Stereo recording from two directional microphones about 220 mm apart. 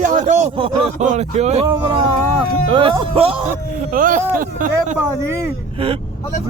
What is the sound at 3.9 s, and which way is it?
Speech, 40° right (ahead or behind).